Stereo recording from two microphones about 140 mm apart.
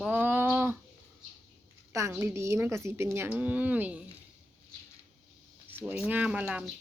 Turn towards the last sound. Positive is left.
turn(degrees=-10)  # may be behind; listen again after turning